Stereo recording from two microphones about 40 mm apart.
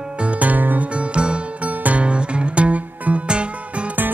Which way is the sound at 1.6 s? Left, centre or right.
Right.